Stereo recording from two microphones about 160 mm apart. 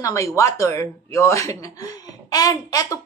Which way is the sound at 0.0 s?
20° left (ahead or behind).